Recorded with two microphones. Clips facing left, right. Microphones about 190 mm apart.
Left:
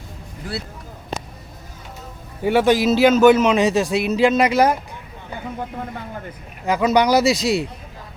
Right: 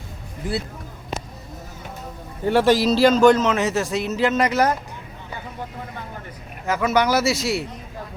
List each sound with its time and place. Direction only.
2.4 s a man's voice: centre (ahead or behind)
6.7 s a man's voice: 15° left (ahead or behind)